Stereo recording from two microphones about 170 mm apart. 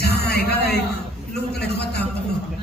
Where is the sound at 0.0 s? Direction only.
70° left (ahead or behind).